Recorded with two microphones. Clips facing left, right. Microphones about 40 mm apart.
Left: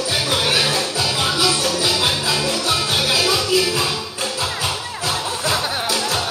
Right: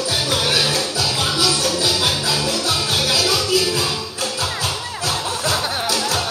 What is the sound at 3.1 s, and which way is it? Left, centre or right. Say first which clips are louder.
Music: left 1 dB; centre.